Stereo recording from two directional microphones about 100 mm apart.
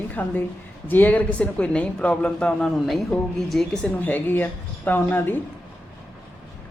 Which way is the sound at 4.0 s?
20° left (ahead or behind).